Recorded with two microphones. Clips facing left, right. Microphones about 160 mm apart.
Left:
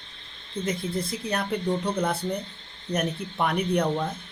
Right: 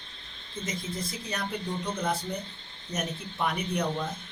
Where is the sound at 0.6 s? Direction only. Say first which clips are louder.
Left 6 dB; 60° left (ahead or behind).